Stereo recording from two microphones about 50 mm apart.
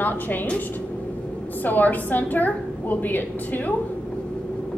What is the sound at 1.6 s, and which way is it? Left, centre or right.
A woman's voice, left.